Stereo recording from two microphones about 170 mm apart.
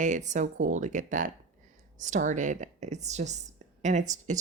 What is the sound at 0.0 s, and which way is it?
A woman's voice, 45° right (ahead or behind).